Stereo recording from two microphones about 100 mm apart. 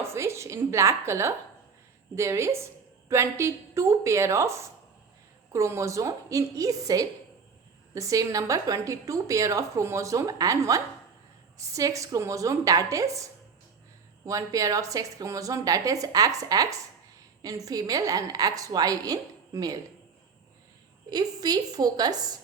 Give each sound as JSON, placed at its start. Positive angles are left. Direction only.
{"t": 0.0, "sound": "a woman's voice", "side_deg": -25}
{"t": 14.3, "sound": "a woman's voice", "side_deg": -35}
{"t": 21.1, "sound": "a woman's voice", "side_deg": -40}